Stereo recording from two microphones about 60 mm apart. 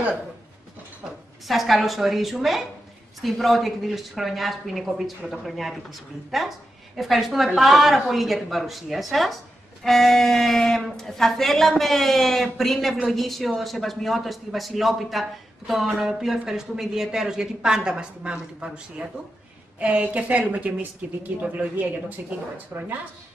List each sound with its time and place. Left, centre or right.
1.5 s a man's voice: centre
22.7 s a woman's voice: right